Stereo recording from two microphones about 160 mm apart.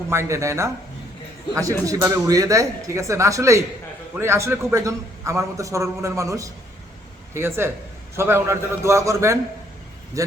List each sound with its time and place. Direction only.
0.1 s a man's voice: 15° right (ahead or behind)